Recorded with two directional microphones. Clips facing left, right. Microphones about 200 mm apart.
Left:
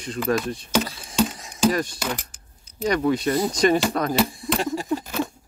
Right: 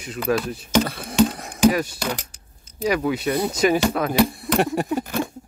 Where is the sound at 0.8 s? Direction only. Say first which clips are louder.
Right 5 dB; 60° right (ahead or behind).